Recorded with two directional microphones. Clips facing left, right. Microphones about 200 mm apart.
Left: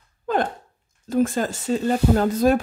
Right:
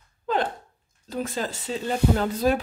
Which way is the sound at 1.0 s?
50° left (ahead or behind).